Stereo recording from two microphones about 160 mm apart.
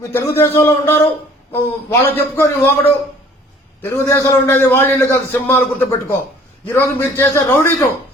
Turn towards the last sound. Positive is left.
turn(degrees=15)  # may be behind; listen again after turning